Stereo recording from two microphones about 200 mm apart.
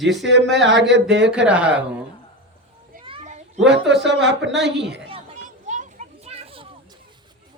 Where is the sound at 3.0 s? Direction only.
30° right (ahead or behind).